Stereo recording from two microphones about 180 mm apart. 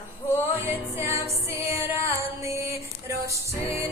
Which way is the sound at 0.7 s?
15° right (ahead or behind).